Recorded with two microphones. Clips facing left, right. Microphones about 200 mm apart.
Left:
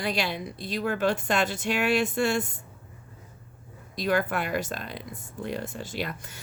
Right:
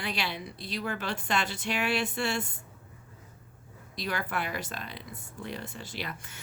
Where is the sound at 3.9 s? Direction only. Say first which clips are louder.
Left 7 dB; 50° left (ahead or behind).